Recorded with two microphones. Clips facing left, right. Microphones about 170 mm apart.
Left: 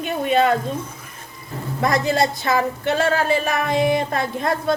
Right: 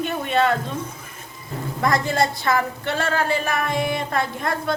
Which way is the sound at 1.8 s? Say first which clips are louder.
Left 2 dB; 25° left (ahead or behind).